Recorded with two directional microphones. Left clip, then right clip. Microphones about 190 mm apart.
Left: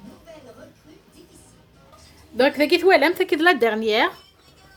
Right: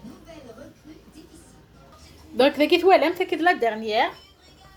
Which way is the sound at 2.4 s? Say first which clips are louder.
Left 1 dB; 15° left (ahead or behind).